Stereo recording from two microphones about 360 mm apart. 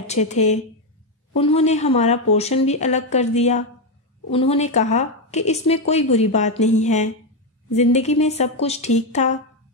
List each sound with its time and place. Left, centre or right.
0.0 s a woman's voice: centre